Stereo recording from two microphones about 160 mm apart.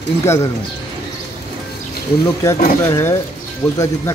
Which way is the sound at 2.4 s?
15° left (ahead or behind).